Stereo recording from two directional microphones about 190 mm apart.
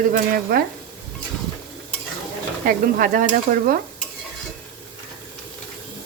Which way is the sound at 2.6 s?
45° right (ahead or behind).